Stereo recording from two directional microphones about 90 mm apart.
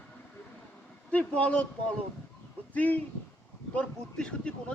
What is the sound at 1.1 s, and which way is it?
Speech, 15° left (ahead or behind).